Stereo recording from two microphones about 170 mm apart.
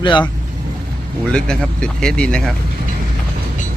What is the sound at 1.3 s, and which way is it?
Speech, 5° left (ahead or behind).